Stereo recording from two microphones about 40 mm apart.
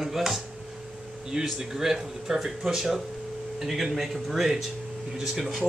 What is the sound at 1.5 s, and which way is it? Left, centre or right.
A man's voice, centre.